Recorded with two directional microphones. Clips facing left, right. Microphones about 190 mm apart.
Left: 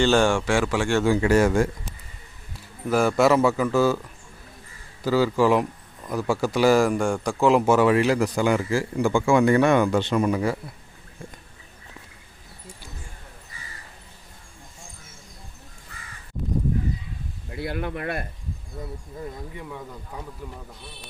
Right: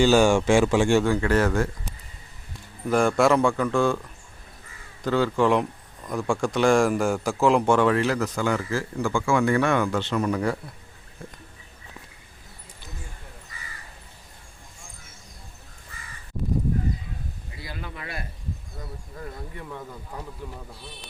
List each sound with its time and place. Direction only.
0.0 s a man's voice: 10° right (ahead or behind)
1.0 s a man's voice: 10° left (ahead or behind)
5.0 s a man's voice: 5° left (ahead or behind)
17.5 s speech: 60° left (ahead or behind)
19.1 s speech: 20° left (ahead or behind)
19.9 s a man's voice: 5° right (ahead or behind)